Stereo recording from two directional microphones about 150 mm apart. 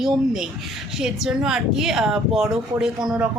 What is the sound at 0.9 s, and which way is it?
Speech, 5° right (ahead or behind).